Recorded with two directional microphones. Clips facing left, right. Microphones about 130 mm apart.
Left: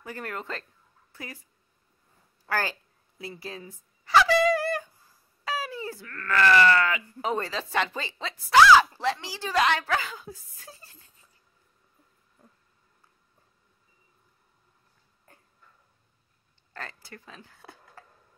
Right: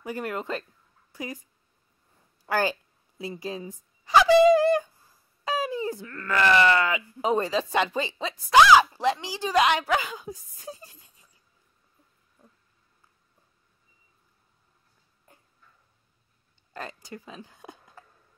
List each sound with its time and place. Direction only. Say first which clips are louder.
0.0 s speech: right 5 dB; 15° right (ahead or behind)
2.4 s fowl: right 4 dB; 20° right (ahead or behind)
5.4 s speech: right 5 dB; 20° right (ahead or behind)
16.7 s speech: right 4 dB; 15° right (ahead or behind)